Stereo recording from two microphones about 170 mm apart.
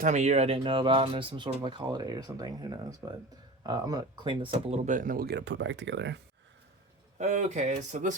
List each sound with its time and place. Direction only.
0.0 s speech: 45° right (ahead or behind); by 6.1 s 90° right
7.2 s speech: 45° right (ahead or behind)